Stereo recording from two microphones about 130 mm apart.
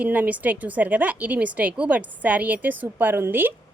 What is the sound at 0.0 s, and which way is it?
Speech, 10° right (ahead or behind).